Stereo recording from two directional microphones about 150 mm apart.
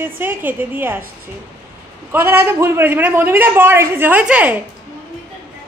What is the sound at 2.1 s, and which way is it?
A man's voice, 15° right (ahead or behind).